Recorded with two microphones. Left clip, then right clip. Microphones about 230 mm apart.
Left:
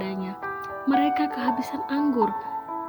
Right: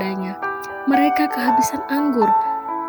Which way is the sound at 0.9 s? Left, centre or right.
Right.